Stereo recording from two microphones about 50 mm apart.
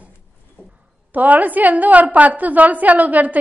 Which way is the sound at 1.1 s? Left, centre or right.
Right.